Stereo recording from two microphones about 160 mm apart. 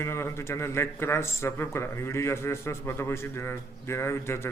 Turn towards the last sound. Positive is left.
turn(degrees=15)  # may be behind; listen again after turning